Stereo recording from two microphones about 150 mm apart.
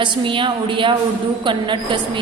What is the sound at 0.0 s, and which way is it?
A woman's voice, 35° right (ahead or behind).